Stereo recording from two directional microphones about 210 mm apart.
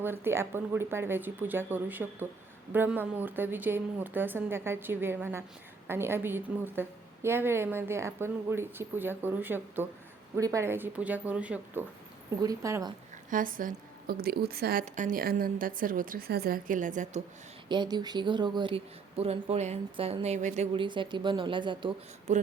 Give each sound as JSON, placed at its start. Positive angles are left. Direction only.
{"t": 0.0, "sound": "a woman's voice", "side_deg": -10}
{"t": 13.3, "sound": "a woman's voice", "side_deg": -40}
{"t": 17.7, "sound": "speech", "side_deg": -20}
{"t": 22.3, "sound": "a woman's voice", "side_deg": -35}